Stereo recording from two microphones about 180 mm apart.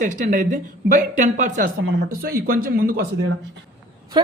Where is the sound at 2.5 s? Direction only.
55° right (ahead or behind).